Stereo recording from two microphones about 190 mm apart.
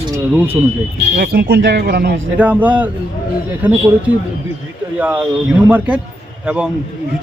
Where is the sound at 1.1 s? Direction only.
55° right (ahead or behind).